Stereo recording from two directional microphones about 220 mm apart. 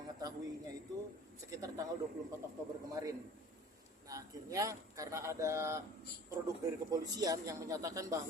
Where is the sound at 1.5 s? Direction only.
15° right (ahead or behind).